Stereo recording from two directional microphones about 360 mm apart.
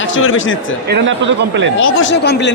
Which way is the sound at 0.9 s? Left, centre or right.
Right.